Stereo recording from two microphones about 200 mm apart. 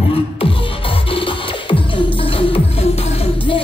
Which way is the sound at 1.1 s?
25° left (ahead or behind).